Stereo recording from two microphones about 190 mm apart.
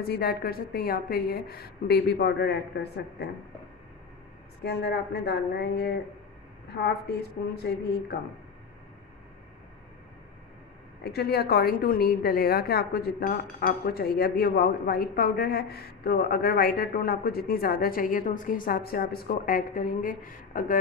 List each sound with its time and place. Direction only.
0.0 s a woman's voice: 55° left (ahead or behind)
4.6 s a woman's voice: 60° left (ahead or behind)
7.5 s a woman's voice: 55° left (ahead or behind)
11.1 s a woman's voice: 55° left (ahead or behind)